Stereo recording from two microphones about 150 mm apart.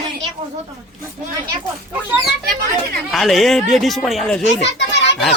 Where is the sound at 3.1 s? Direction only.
Centre (ahead or behind).